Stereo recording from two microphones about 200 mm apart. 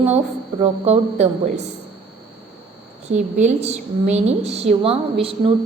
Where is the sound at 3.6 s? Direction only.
35° right (ahead or behind).